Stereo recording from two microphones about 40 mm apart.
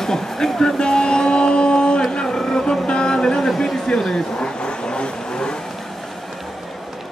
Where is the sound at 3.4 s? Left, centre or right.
Centre.